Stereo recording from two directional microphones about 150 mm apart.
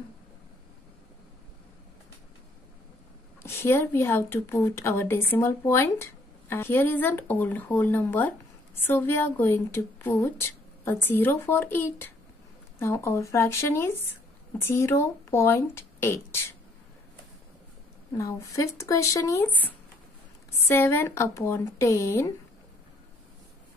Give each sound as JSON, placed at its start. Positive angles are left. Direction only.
{"t": 3.4, "sound": "speech", "side_deg": 15}
{"t": 18.1, "sound": "speech", "side_deg": 20}